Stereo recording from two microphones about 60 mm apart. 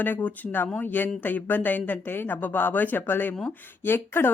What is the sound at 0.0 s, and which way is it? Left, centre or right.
Speech, left.